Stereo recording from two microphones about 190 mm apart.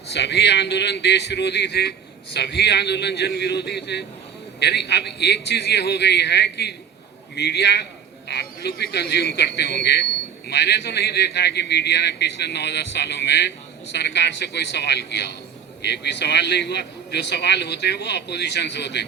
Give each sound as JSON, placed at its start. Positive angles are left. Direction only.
{"t": 0.1, "sound": "a man's voice", "side_deg": 65}